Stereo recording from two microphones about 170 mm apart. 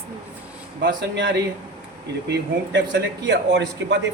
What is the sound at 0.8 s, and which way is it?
A man's voice, 90° right.